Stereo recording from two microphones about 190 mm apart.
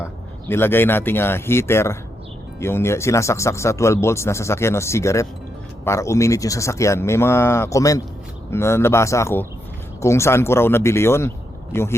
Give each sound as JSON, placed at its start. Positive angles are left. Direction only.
{"t": 0.0, "sound": "speech", "side_deg": 10}